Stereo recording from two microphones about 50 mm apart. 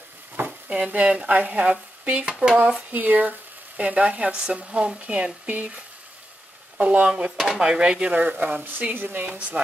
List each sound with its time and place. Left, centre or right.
0.5 s speech: right
2.3 s speech: centre
2.6 s speech: right
6.8 s speech: right
7.3 s speech: centre
7.6 s speech: centre
8.1 s speech: right
8.9 s a woman's voice: right
9.3 s speech: right